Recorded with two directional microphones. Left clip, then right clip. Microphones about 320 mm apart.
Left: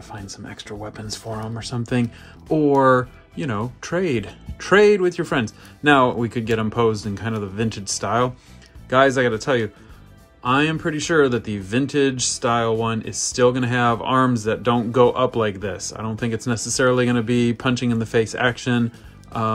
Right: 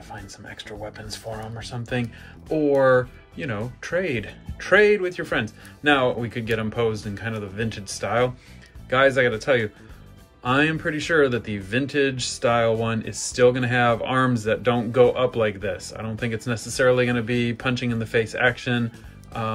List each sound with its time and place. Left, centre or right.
0.3 s speech: centre